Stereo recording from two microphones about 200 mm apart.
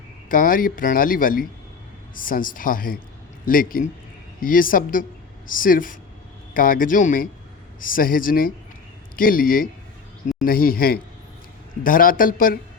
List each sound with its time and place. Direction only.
0.3 s speech: 45° left (ahead or behind)